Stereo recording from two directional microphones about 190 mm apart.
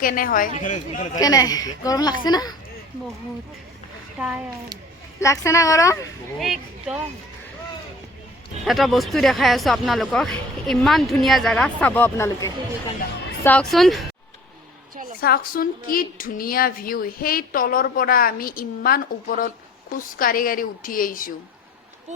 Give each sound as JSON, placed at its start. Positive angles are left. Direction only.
{"t": 0.0, "sound": "speech", "side_deg": 50}
{"t": 1.1, "sound": "speech", "side_deg": 20}
{"t": 4.2, "sound": "speech", "side_deg": -5}
{"t": 5.2, "sound": "a woman's voice", "side_deg": 15}
{"t": 6.4, "sound": "speech", "side_deg": -5}
{"t": 8.6, "sound": "speech", "side_deg": 0}
{"t": 15.2, "sound": "speech", "side_deg": 50}